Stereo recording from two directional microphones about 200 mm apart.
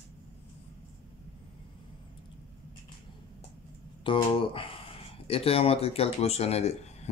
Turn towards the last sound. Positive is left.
turn(degrees=30)  # may be behind; listen again after turning